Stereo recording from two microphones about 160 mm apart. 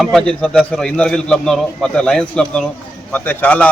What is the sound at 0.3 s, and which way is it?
A man's voice, 5° left (ahead or behind).